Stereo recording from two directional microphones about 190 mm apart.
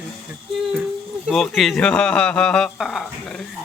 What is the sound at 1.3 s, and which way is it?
Speech, centre (ahead or behind).